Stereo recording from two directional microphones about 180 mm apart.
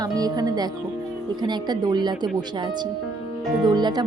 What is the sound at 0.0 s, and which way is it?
Speech, 20° right (ahead or behind).